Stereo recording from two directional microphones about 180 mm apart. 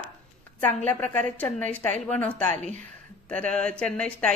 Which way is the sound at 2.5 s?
40° right (ahead or behind).